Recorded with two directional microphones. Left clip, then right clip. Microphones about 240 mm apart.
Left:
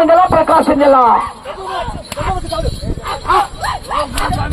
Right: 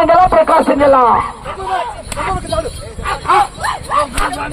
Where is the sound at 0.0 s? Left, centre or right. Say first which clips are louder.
Even; right.